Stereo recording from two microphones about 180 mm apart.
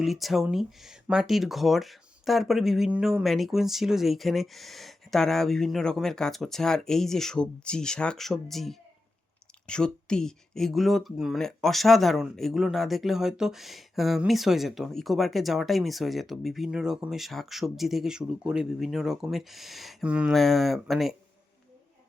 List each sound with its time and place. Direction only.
0.0 s speech: centre (ahead or behind)